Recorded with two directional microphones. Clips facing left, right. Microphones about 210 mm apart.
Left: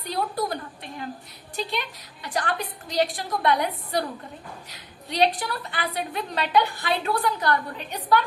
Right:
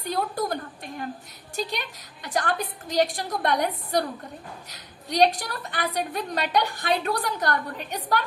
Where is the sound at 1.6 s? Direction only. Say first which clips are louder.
Even; 45° right (ahead or behind).